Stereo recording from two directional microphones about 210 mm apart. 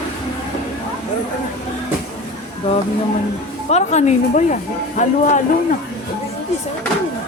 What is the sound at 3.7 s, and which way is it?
Speech, 35° left (ahead or behind).